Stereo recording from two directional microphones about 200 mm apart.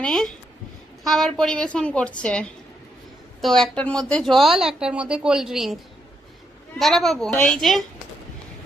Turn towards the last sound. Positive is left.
turn(degrees=0)  # may be behind; listen again after turning